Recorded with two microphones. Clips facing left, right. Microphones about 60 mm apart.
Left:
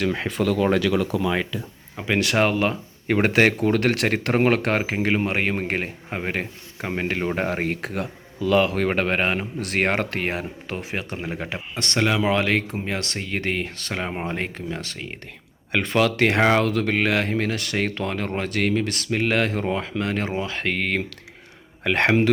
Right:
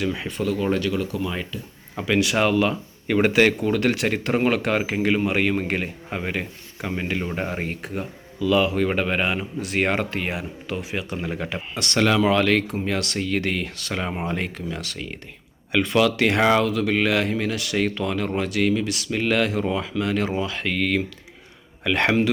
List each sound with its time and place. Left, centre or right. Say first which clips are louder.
0.0 s speech: left 2 dB; left
0.3 s speech: left 4 dB; left
2.1 s speech: right 1 dB; left
4.3 s speech: left 1 dB; left
4.8 s speech: right 1 dB; left
6.3 s speech: left 1 dB; left
8.4 s speech: even; left
11.2 s speech: right 1 dB; left
14.0 s speech: right 1 dB; left
14.3 s speech: even; left